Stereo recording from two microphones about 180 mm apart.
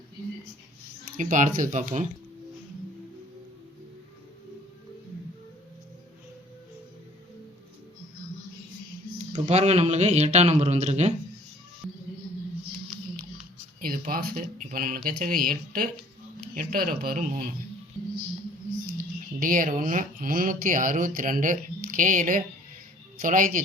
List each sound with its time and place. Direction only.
1.1 s speech: 45° right (ahead or behind)
9.1 s a man's voice: 35° right (ahead or behind)
11.8 s a sound: centre (ahead or behind)
13.8 s speech: 55° right (ahead or behind)
19.4 s speech: 50° right (ahead or behind)